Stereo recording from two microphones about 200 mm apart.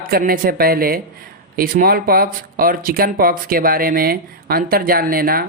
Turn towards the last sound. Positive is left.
turn(degrees=-50)  # may be behind; listen again after turning